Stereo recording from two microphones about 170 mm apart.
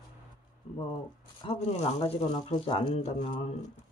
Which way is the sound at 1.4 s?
35° left (ahead or behind).